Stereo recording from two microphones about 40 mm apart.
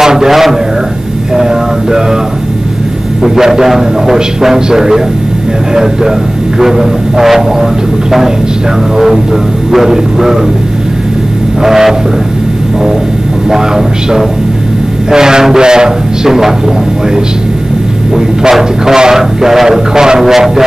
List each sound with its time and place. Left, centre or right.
0.0 s a man's voice: centre
3.3 s a man's voice: centre
6.6 s a man's voice: centre
8.9 s a man's voice: centre
11.6 s a man's voice: centre
13.5 s a man's voice: centre
18.5 s a man's voice: centre